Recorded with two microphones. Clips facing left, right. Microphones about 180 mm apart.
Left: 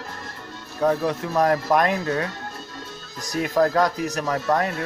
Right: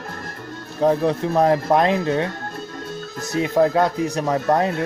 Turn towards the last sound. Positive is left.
turn(degrees=-30)  # may be behind; listen again after turning